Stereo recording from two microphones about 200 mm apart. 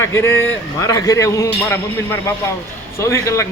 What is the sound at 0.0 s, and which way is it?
Speech, 15° left (ahead or behind).